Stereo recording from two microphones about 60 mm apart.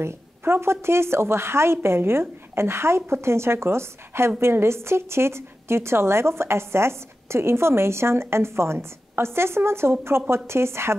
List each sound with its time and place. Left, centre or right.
0.0 s a woman's voice: right